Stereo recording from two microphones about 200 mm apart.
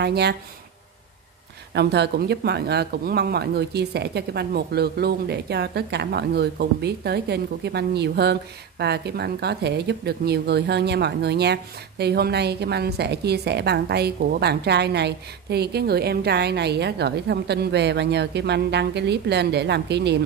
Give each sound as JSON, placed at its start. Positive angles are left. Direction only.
{"t": 0.0, "sound": "speech", "side_deg": -55}
{"t": 1.7, "sound": "speech", "side_deg": -55}